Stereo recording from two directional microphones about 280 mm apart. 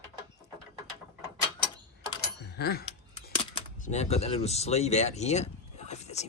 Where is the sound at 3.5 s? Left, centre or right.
Left.